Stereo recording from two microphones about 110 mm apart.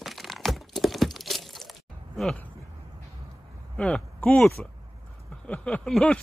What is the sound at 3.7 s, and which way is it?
Speech, 10° left (ahead or behind).